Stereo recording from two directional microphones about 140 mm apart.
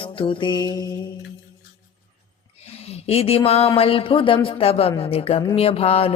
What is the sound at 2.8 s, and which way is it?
Speech, 45° left (ahead or behind).